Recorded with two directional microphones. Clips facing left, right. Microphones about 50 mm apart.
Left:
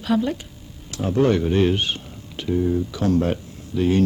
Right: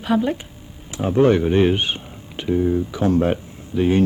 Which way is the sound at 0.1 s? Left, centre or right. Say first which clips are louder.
Right 2 dB; right.